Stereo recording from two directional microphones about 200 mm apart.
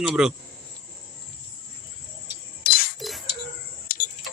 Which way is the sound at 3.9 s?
45° left (ahead or behind).